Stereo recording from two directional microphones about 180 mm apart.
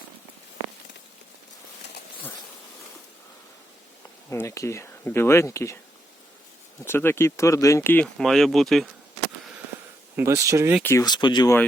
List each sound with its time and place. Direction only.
4.3 s speech: 15° left (ahead or behind)
6.8 s speech: 15° left (ahead or behind)
10.2 s speech: 15° right (ahead or behind)
10.8 s speech: 20° left (ahead or behind)